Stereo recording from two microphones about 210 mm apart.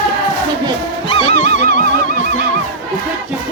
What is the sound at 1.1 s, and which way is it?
Music, 35° left (ahead or behind).